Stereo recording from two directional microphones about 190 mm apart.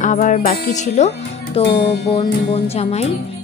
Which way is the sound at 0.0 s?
40° left (ahead or behind).